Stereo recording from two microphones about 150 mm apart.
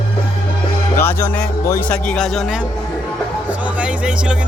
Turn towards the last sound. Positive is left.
turn(degrees=-5)  # may be behind; listen again after turning